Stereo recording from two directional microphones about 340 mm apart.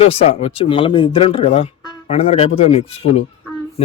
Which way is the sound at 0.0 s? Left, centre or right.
Centre.